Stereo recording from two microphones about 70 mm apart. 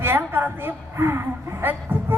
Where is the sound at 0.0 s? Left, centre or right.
Right.